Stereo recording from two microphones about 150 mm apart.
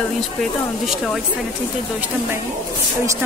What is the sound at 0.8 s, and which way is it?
Speech, centre (ahead or behind).